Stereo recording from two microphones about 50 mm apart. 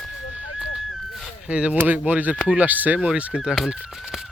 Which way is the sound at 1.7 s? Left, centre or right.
Right.